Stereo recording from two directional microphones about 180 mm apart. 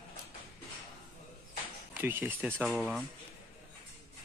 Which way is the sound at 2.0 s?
10° right (ahead or behind).